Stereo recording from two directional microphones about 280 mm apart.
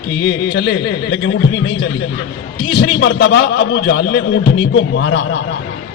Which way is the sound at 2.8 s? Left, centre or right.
Left.